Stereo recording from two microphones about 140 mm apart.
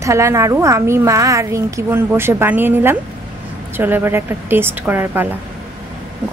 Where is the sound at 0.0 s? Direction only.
20° right (ahead or behind).